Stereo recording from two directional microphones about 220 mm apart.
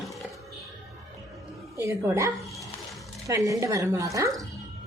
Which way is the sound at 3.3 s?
15° right (ahead or behind).